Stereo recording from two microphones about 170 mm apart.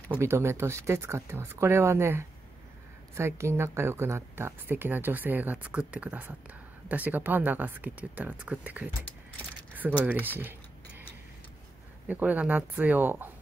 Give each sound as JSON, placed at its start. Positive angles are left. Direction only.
{"t": 0.2, "sound": "speech", "side_deg": -15}
{"t": 10.0, "sound": "speech", "side_deg": -10}
{"t": 12.1, "sound": "speech", "side_deg": -10}